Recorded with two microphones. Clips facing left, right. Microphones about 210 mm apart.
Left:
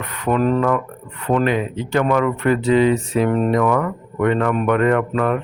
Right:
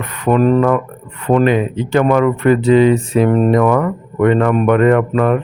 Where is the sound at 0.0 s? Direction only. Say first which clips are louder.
Right 4 dB; 20° right (ahead or behind).